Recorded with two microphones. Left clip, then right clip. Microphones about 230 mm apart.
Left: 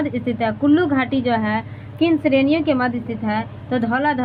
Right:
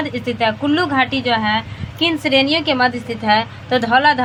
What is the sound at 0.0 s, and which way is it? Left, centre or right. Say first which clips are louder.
A woman's voice: right 3 dB; centre.